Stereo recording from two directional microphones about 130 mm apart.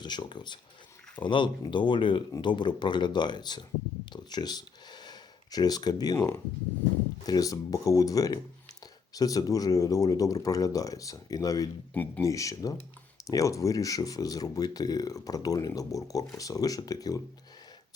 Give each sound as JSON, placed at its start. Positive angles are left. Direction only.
{"t": 0.0, "sound": "speech", "side_deg": 35}
{"t": 4.1, "sound": "a sound", "side_deg": 35}
{"t": 6.1, "sound": "speech", "side_deg": 20}